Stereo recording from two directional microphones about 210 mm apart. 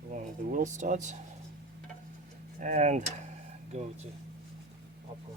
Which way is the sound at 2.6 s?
35° right (ahead or behind).